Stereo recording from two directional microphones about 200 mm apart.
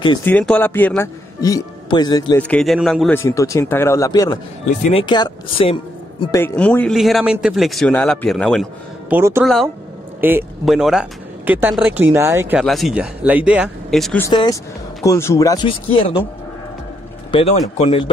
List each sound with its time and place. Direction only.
0.2 s speech: 10° left (ahead or behind)
2.3 s a man's voice: 5° left (ahead or behind)
3.3 s speech: 15° left (ahead or behind)
6.3 s a man's voice: 10° left (ahead or behind)
9.1 s speech: 10° right (ahead or behind)
12.6 s a man's voice: centre (ahead or behind)
14.2 s speech: 20° left (ahead or behind)
17.3 s speech: 30° left (ahead or behind)